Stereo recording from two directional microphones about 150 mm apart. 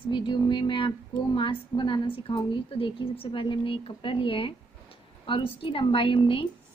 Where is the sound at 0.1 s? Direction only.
35° left (ahead or behind).